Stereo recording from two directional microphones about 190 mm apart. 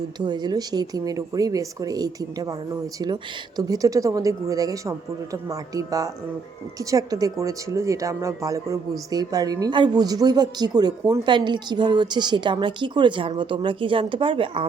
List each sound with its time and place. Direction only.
0.2 s speech: 20° right (ahead or behind)
3.6 s a woman's voice: 20° right (ahead or behind)